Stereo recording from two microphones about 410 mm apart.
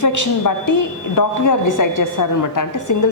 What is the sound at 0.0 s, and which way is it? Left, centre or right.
A woman's voice, left.